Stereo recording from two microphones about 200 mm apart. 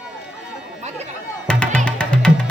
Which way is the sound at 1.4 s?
5° left (ahead or behind).